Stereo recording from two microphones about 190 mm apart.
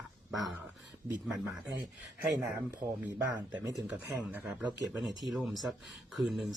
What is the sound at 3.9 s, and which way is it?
Speech, 10° right (ahead or behind).